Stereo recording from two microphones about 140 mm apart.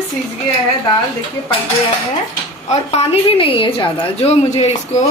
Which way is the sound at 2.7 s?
50° left (ahead or behind).